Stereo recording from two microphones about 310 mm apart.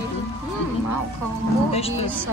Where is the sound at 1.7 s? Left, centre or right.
Centre.